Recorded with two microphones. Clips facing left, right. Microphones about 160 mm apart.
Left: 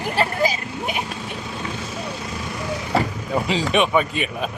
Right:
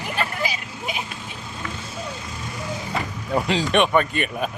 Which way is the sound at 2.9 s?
35° left (ahead or behind).